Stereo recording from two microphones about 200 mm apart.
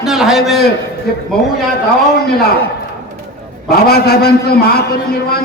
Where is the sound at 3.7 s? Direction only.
50° left (ahead or behind).